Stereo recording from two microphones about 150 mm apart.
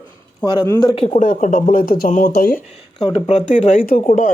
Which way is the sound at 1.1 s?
55° left (ahead or behind).